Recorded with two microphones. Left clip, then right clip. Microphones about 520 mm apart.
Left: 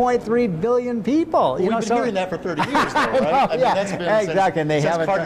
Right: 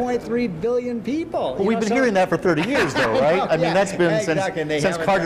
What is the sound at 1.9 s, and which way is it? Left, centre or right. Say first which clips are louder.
Speech: right 3 dB; right.